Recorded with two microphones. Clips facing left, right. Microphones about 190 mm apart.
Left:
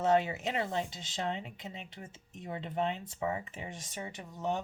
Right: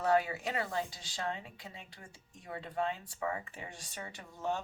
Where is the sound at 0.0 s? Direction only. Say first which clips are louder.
Left 2 dB; 25° left (ahead or behind).